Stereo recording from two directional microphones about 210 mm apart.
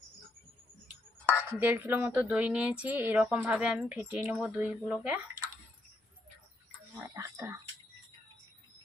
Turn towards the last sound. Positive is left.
turn(degrees=-15)  # may be behind; listen again after turning